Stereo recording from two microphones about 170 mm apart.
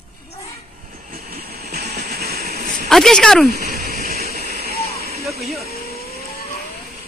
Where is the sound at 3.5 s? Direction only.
60° right (ahead or behind).